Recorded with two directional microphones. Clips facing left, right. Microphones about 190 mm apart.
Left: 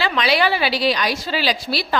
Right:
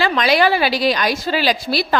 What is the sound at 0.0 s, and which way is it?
A woman's voice, 45° right (ahead or behind).